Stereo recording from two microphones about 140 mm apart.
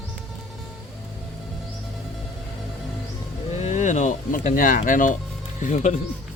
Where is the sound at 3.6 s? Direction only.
60° left (ahead or behind).